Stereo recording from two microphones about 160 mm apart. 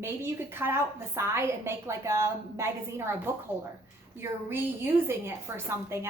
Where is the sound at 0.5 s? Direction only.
15° right (ahead or behind).